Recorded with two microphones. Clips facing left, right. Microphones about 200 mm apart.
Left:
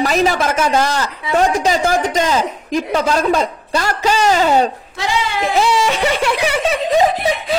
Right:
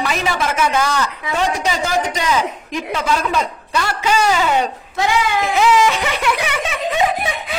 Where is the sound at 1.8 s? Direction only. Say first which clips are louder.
Left 4 dB; 50° left (ahead or behind).